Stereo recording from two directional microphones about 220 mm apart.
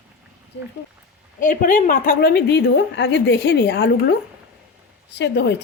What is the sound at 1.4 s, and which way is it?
A woman's voice, 40° left (ahead or behind).